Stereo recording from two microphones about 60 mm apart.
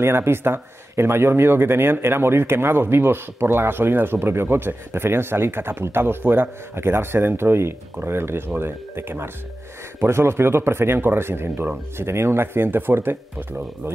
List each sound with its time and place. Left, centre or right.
0.0 s speech: right